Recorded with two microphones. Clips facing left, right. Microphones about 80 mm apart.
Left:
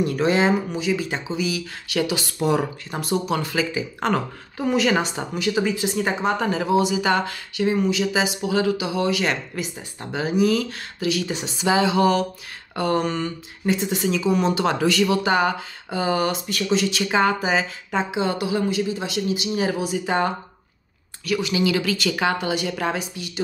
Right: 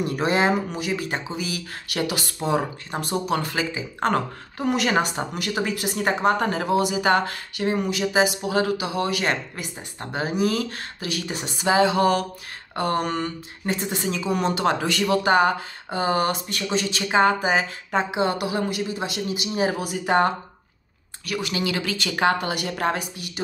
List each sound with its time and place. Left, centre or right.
0.0 s speech: right
2.4 s speech: right
3.0 s a woman's voice: right
12.7 s a sound: right
13.0 s speech: right
13.8 s a woman's voice: right
16.7 s a woman's voice: right
19.8 s a woman's voice: right